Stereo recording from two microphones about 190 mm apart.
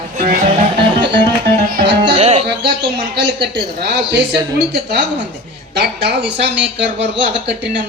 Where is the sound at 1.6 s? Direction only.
55° right (ahead or behind).